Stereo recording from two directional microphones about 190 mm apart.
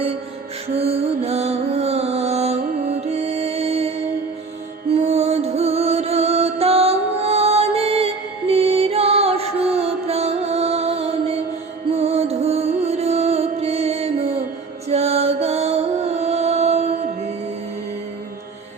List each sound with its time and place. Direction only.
0.7 s music: 30° right (ahead or behind)
4.9 s music: 35° right (ahead or behind)